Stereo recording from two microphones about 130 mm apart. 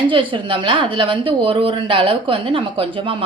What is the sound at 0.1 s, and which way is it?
A woman's voice, 40° right (ahead or behind).